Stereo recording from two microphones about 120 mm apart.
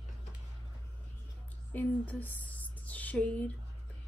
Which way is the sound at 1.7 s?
15° left (ahead or behind).